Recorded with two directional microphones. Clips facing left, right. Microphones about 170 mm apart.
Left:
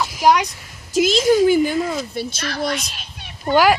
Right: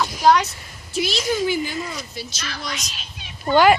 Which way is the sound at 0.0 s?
10° left (ahead or behind).